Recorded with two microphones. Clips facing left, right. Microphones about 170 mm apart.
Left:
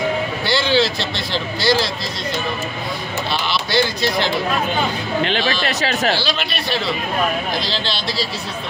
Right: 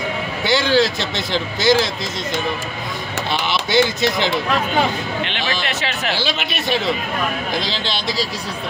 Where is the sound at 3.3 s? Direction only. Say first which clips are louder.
Right 2 dB; 20° right (ahead or behind).